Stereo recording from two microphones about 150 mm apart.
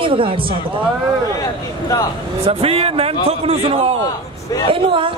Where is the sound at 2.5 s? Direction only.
40° right (ahead or behind).